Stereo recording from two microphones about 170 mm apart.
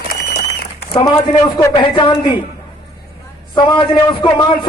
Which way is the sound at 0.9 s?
25° left (ahead or behind).